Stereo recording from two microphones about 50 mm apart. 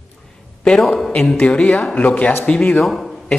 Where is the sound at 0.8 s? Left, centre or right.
Centre.